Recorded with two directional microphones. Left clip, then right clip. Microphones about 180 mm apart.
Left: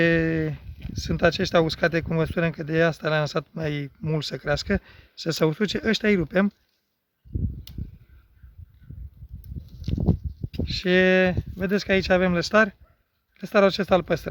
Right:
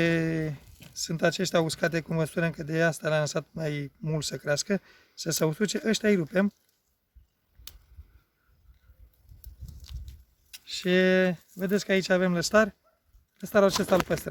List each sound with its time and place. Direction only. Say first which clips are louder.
0.0 s speech: left 5 dB; 15° left (ahead or behind)
10.7 s speech: left 4 dB; 10° left (ahead or behind)